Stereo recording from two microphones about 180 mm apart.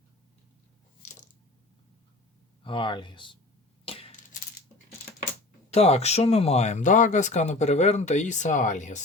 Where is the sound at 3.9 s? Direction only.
30° left (ahead or behind).